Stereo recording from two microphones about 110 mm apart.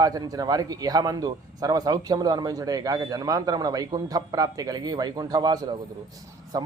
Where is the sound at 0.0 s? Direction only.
35° right (ahead or behind).